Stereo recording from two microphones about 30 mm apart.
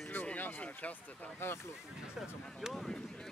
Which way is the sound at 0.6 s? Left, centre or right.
Left.